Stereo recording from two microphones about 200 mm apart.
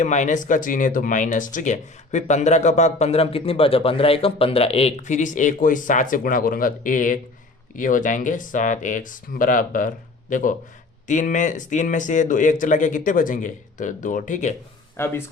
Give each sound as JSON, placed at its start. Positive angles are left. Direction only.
{"t": 0.0, "sound": "speech", "side_deg": 35}
{"t": 14.9, "sound": "speech", "side_deg": 10}